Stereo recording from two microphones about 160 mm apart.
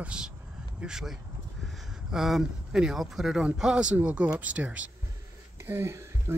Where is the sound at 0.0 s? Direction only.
5° right (ahead or behind).